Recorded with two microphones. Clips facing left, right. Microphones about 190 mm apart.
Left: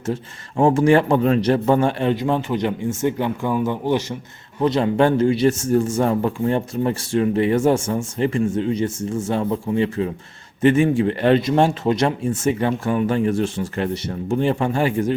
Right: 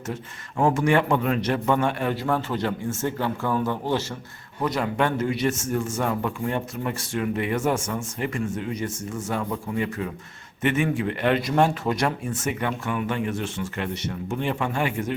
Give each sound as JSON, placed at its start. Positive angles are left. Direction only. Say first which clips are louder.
{"t": 0.0, "sound": "a man's voice", "louder": "left 7 dB", "side_deg": 30}
{"t": 4.6, "sound": "a man's voice", "louder": "left 7 dB", "side_deg": 25}